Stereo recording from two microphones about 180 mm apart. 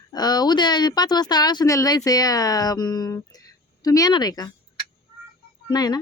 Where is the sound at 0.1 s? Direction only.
20° left (ahead or behind).